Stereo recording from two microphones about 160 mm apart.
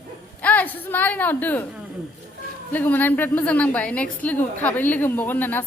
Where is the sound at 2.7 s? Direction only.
10° left (ahead or behind).